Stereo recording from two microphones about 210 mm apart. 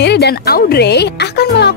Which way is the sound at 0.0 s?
50° left (ahead or behind).